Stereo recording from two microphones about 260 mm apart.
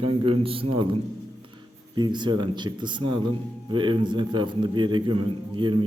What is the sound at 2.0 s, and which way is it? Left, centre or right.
A man's voice, centre.